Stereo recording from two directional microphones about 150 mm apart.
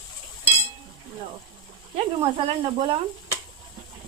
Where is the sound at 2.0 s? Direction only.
40° right (ahead or behind).